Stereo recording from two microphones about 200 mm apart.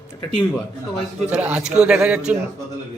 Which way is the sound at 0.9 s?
5° right (ahead or behind).